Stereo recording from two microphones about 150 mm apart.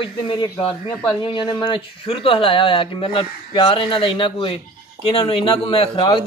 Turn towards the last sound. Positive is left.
turn(degrees=35)  # may be behind; listen again after turning